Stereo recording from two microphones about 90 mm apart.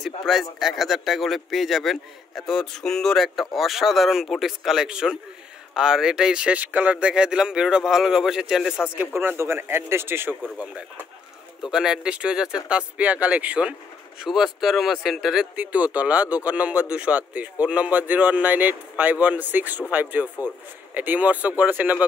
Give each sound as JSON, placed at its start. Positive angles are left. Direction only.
{"t": 0.0, "sound": "speech", "side_deg": 0}
{"t": 8.9, "sound": "a man's voice", "side_deg": -20}
{"t": 11.7, "sound": "speech", "side_deg": -5}
{"t": 14.2, "sound": "speech", "side_deg": -5}
{"t": 15.5, "sound": "a man's voice", "side_deg": -15}